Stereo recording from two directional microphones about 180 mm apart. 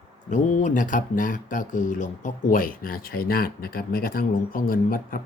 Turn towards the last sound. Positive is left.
turn(degrees=50)  # may be behind; listen again after turning